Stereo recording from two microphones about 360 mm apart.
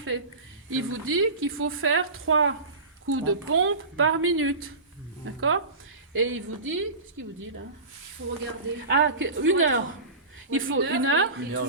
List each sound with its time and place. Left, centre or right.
0.7 s a woman's voice: right
8.9 s a woman's voice: right